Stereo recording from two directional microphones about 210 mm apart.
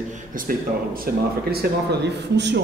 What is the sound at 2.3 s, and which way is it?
Speech, 55° right (ahead or behind).